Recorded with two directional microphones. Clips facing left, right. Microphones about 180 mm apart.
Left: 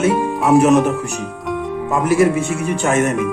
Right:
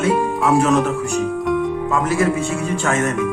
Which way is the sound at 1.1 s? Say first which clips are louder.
Right 5 dB; centre (ahead or behind).